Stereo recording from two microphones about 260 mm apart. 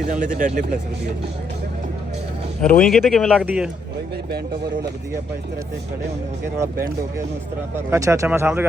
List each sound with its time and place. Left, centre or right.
0.1 s speech: right
2.6 s speech: centre
7.8 s speech: centre